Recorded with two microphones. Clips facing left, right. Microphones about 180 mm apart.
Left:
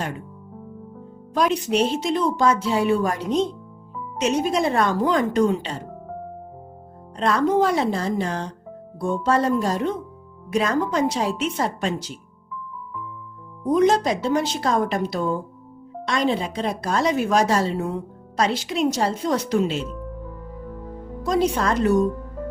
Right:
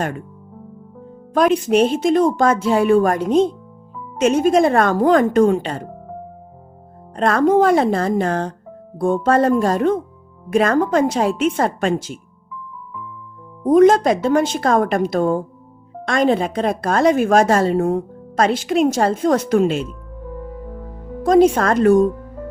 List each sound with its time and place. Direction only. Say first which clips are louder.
0.0 s speech: right 6 dB; 50° right (ahead or behind)
1.3 s speech: right 6 dB; 50° right (ahead or behind)
7.2 s speech: right 5 dB; 55° right (ahead or behind)
13.7 s speech: right 7 dB; 50° right (ahead or behind)
21.2 s speech: right 8 dB; 50° right (ahead or behind)